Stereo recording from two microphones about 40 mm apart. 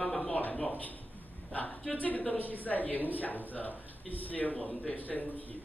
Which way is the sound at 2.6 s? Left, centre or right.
Left.